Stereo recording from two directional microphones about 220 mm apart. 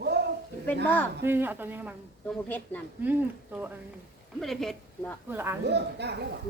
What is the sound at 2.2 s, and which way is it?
Speech, 5° left (ahead or behind).